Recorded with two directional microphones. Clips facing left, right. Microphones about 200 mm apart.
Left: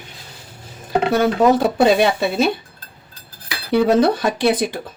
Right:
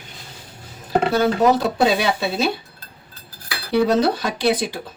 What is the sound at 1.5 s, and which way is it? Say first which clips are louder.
Speech: left 4 dB; 55° left (ahead or behind).